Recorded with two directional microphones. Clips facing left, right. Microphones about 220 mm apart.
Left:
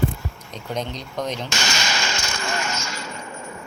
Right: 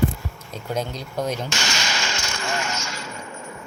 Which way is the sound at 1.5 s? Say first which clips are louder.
Left 1 dB; 45° left (ahead or behind).